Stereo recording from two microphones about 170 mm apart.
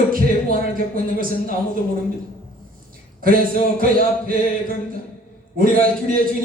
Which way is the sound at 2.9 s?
55° right (ahead or behind).